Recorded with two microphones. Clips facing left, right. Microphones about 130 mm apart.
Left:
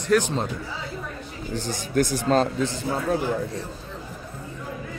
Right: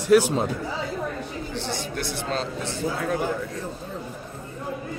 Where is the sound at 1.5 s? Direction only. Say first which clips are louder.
Left 7 dB; 45° left (ahead or behind).